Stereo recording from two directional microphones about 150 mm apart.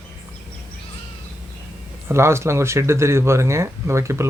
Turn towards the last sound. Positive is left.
turn(degrees=-20)  # may be behind; listen again after turning